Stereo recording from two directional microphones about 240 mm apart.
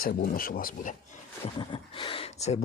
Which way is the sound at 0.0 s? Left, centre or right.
Left.